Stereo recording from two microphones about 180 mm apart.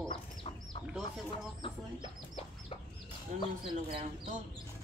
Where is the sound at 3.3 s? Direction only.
40° right (ahead or behind).